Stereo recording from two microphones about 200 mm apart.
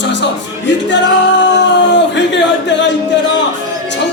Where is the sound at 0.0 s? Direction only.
60° left (ahead or behind).